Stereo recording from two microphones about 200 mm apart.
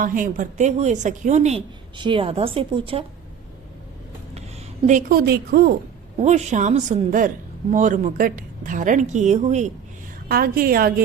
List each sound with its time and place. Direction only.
0.0 s a woman's voice: 45° right (ahead or behind); by 3.0 s 25° right (ahead or behind)
4.9 s a woman's voice: 40° right (ahead or behind)
6.1 s a woman's voice: 35° right (ahead or behind)
10.2 s a woman's voice: 50° right (ahead or behind)